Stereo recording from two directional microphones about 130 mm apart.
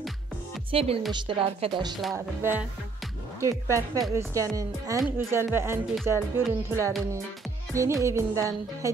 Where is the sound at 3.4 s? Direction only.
20° right (ahead or behind).